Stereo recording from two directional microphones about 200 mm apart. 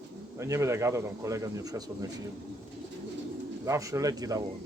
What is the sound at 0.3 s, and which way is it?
A man's voice, 15° right (ahead or behind).